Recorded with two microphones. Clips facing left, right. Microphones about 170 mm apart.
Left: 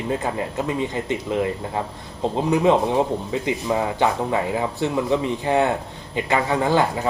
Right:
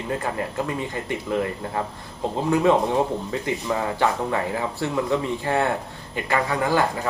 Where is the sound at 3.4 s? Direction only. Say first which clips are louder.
Left 3 dB; 20° left (ahead or behind).